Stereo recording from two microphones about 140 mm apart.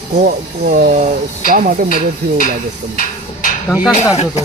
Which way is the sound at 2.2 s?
90° right.